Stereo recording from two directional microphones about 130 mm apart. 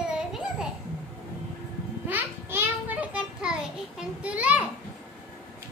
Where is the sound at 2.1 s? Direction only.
15° right (ahead or behind).